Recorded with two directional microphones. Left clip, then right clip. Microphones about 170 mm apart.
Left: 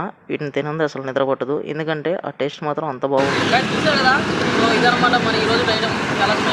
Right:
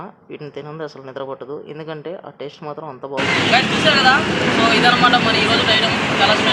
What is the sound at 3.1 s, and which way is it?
Speech, centre (ahead or behind).